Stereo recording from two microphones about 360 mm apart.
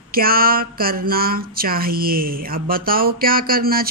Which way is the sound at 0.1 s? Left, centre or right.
Right.